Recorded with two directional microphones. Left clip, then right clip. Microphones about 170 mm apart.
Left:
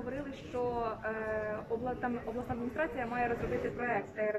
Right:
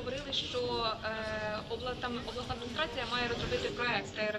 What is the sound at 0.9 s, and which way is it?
A woman's voice, 40° left (ahead or behind).